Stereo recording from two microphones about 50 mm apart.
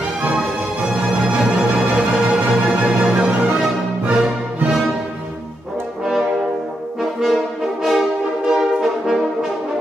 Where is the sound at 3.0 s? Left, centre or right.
Right.